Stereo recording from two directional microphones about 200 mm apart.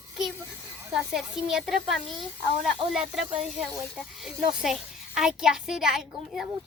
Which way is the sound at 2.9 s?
Centre (ahead or behind).